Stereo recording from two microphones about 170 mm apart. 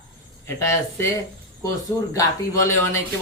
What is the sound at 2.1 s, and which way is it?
Speech, 15° left (ahead or behind).